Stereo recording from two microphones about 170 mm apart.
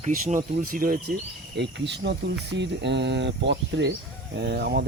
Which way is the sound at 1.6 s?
90° right.